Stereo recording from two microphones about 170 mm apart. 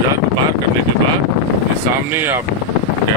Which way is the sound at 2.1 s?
15° right (ahead or behind).